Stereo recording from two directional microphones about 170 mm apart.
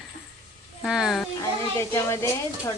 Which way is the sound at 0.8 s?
Centre (ahead or behind).